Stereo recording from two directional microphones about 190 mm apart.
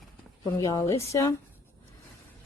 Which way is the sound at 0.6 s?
15° left (ahead or behind).